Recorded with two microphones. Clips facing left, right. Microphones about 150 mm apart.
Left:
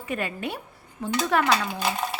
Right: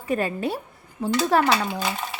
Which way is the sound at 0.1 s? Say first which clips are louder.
Right 6 dB; 35° right (ahead or behind).